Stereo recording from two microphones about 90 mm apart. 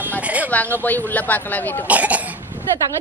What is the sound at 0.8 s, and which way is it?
Speech, 20° left (ahead or behind).